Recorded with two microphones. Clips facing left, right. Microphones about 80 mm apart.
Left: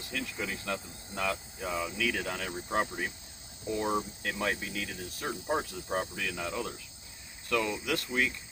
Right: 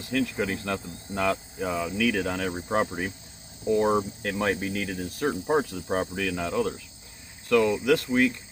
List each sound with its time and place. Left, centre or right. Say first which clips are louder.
0.1 s speech: right 10 dB; right
3.8 s speech: right 7 dB; right
7.5 s speech: right 10 dB; right